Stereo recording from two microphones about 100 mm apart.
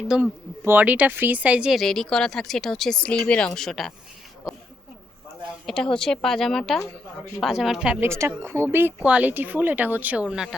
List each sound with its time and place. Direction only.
0.1 s speech: 10° right (ahead or behind)
0.6 s speech: 20° right (ahead or behind)
1.7 s speech: centre (ahead or behind)
4.4 s a sound: 10° right (ahead or behind)
5.6 s speech: 5° left (ahead or behind)
8.0 s speech: 30° right (ahead or behind)
9.0 s speech: 15° right (ahead or behind)